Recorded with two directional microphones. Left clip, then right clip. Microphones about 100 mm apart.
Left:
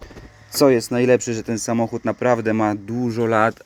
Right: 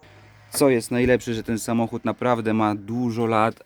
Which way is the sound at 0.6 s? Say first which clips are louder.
Left 4 dB; 10° right (ahead or behind).